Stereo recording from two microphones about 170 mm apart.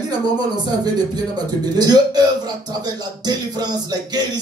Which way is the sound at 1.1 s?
25° right (ahead or behind).